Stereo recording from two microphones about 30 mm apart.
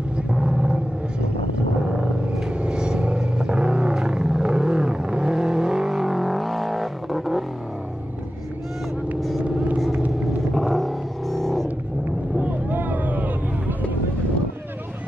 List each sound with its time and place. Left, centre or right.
0.3 s vehicle: right
2.6 s vehicle: right
3.2 s a sound: right
4.5 s vehicle: right
5.9 s vehicle: centre
10.5 s a sound: centre
12.4 s vehicle: right